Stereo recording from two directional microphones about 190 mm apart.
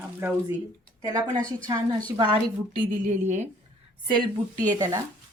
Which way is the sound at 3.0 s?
40° right (ahead or behind).